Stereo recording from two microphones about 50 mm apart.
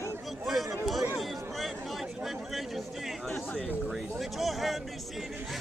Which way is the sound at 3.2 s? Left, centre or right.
Centre.